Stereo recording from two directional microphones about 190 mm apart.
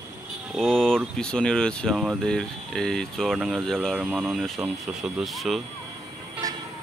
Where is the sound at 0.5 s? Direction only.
Centre (ahead or behind).